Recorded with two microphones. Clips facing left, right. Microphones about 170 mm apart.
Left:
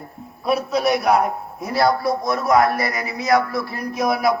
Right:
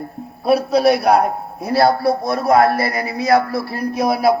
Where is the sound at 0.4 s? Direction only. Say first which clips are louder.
Right 6 dB; 35° right (ahead or behind).